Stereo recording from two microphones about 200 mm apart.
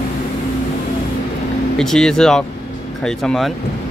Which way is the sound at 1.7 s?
Centre (ahead or behind).